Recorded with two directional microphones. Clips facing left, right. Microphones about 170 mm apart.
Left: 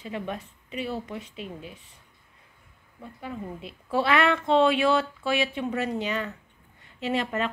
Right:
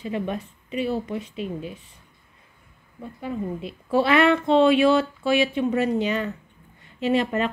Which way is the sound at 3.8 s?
30° right (ahead or behind).